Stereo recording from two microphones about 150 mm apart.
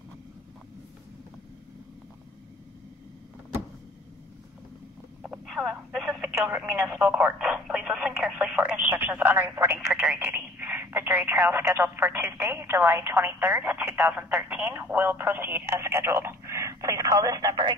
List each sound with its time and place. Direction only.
5.2 s telephone: centre (ahead or behind)
5.9 s speech: 5° right (ahead or behind); by 17.7 s 25° right (ahead or behind)